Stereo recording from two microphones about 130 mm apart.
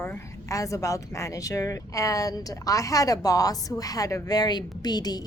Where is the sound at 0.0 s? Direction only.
20° left (ahead or behind).